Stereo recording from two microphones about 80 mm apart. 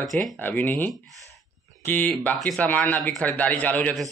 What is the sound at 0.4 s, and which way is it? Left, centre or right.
Speech, left.